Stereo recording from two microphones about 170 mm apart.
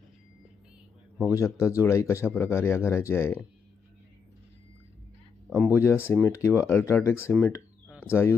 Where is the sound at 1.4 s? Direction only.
15° left (ahead or behind).